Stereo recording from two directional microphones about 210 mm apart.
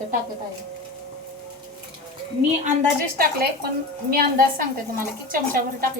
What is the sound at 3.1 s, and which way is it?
A woman's voice, 45° right (ahead or behind).